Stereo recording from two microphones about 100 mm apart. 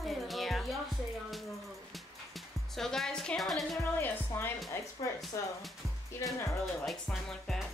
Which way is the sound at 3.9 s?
20° left (ahead or behind).